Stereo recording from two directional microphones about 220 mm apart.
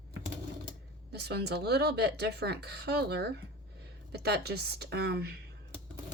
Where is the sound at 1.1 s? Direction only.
50° right (ahead or behind).